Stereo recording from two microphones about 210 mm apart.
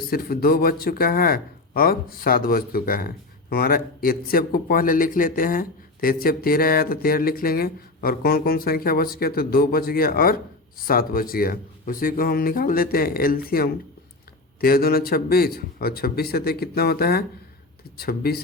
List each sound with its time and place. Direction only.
0.1 s speech: 45° left (ahead or behind)